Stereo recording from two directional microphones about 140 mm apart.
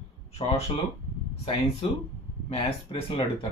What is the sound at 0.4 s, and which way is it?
Speech, 45° left (ahead or behind).